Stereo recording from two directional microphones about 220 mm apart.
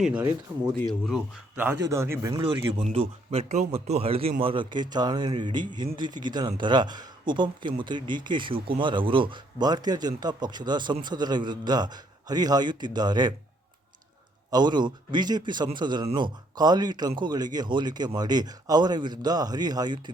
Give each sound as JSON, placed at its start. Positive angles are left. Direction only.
{"t": 0.0, "sound": "speech", "side_deg": -5}
{"t": 0.3, "sound": "speech", "side_deg": -20}
{"t": 1.0, "sound": "speech", "side_deg": -5}
{"t": 14.5, "sound": "speech", "side_deg": -20}